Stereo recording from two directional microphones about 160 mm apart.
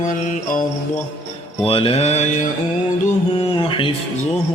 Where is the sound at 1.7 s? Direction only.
35° left (ahead or behind).